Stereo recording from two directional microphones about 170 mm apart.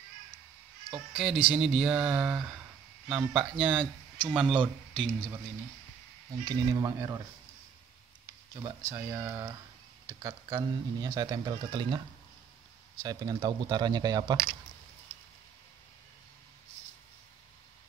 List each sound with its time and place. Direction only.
1.1 s speech: centre (ahead or behind)
6.4 s speech: 20° right (ahead or behind)
8.5 s speech: 15° right (ahead or behind)
13.0 s speech: 25° right (ahead or behind)